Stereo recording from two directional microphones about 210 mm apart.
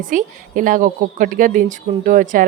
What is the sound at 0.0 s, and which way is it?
A woman's voice, 40° right (ahead or behind).